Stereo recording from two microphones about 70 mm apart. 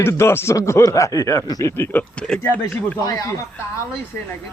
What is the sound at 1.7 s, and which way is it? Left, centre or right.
Speech, left.